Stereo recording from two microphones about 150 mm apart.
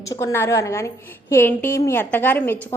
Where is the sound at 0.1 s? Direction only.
20° left (ahead or behind).